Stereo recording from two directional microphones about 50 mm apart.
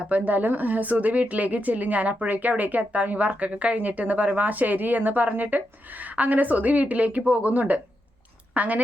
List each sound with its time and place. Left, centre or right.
0.0 s speech: right